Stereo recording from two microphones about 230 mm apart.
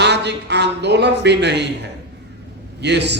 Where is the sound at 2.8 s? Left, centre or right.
Right.